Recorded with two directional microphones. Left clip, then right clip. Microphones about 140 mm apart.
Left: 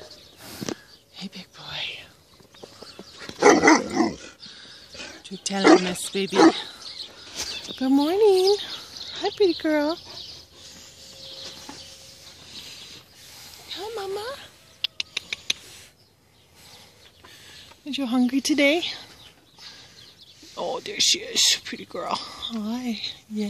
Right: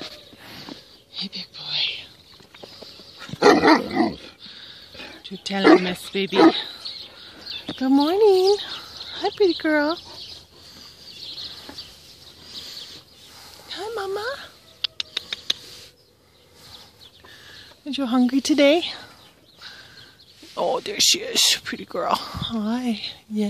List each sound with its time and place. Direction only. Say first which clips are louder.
1.2 s whispering: right 7 dB; 5° left (ahead or behind)
3.3 s dog: right 1 dB; 20° right (ahead or behind)
4.4 s a sound: right 2 dB; centre (ahead or behind)
4.9 s bird: left 1 dB; 10° right (ahead or behind)
5.2 s speech: right 1 dB; 5° left (ahead or behind)
7.8 s speech: right 2 dB; 5° left (ahead or behind)
8.6 s a sound: right 2 dB; 5° left (ahead or behind)
13.7 s mouse: right 3 dB; 5° right (ahead or behind)
17.8 s speech: right 3 dB; 5° right (ahead or behind)
20.5 s speech: right 4 dB; 15° right (ahead or behind)